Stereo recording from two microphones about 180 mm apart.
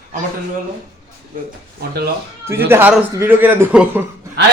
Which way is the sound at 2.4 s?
15° right (ahead or behind).